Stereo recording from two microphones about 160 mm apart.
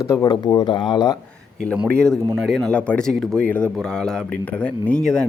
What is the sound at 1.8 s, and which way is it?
Speech, 5° left (ahead or behind).